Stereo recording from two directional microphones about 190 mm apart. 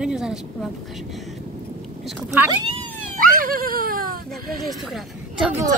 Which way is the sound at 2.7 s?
45° right (ahead or behind).